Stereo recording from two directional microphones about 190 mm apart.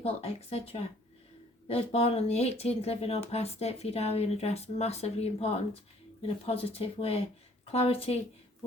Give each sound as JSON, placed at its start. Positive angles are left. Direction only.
{"t": 0.0, "sound": "speech", "side_deg": 30}